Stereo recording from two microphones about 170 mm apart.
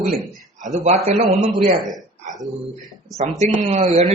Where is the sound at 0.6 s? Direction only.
45° right (ahead or behind).